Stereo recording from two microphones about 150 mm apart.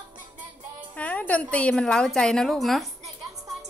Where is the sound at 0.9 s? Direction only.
10° left (ahead or behind).